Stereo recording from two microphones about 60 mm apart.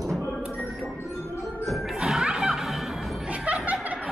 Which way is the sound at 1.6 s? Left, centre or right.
Centre.